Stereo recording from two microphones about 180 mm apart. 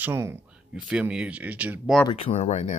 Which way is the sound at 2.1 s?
35° left (ahead or behind).